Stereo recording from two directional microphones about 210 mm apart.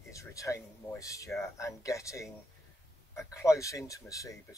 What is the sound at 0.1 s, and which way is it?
Speech, 15° left (ahead or behind).